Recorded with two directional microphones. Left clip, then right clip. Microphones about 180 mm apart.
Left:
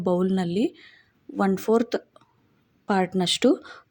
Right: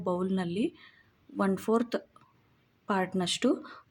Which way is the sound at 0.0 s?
25° left (ahead or behind).